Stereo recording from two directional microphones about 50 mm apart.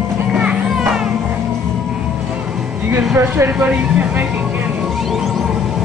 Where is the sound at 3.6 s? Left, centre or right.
Right.